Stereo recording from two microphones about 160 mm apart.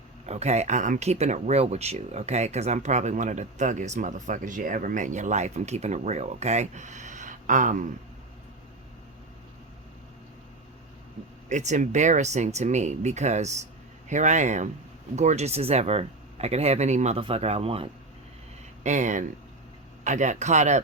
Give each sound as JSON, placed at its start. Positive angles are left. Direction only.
{"t": 0.3, "sound": "speech", "side_deg": -45}
{"t": 11.4, "sound": "speech", "side_deg": -50}
{"t": 18.8, "sound": "speech", "side_deg": -45}